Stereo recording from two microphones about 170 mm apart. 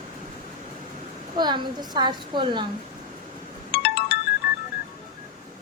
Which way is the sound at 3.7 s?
70° left (ahead or behind).